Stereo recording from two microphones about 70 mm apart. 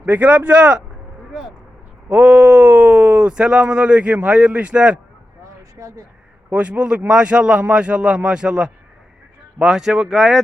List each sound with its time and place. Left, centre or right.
0.0 s speech: right
2.0 s speech: centre
5.8 s speech: right
6.5 s speech: centre